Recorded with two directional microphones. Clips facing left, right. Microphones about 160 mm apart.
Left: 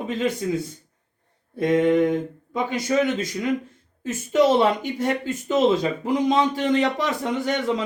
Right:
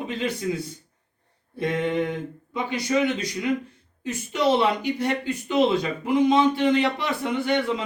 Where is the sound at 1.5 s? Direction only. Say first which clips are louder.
Left 6 dB; 45° left (ahead or behind).